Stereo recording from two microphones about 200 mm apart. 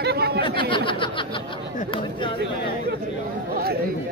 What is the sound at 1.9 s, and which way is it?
Chatter, 25° left (ahead or behind).